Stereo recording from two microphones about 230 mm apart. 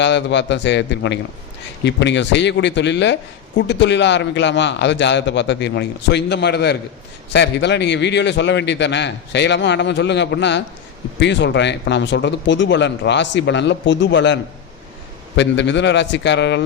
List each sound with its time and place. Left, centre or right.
0.0 s a man's voice: left
15.4 s a man's voice: left